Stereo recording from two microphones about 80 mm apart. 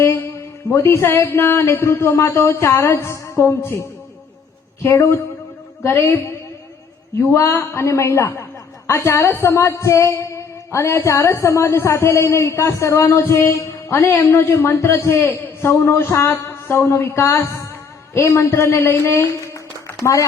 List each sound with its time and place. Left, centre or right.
0.0 s speech: left
7.3 s speech: left